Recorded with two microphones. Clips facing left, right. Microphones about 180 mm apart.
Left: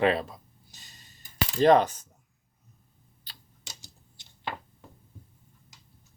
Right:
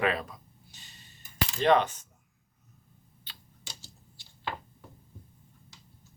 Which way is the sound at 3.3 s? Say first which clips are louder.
Left 1 dB; 40° left (ahead or behind).